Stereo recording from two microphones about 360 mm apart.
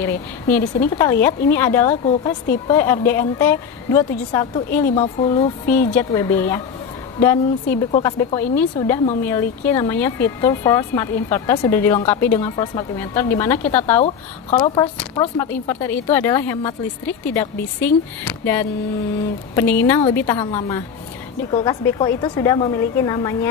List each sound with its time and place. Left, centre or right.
0.8 s a woman's voice: centre